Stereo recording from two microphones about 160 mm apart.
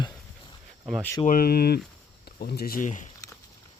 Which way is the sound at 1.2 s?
65° left (ahead or behind).